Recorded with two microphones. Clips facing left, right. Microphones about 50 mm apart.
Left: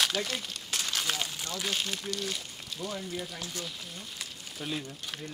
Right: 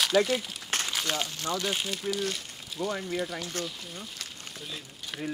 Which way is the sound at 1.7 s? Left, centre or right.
Centre.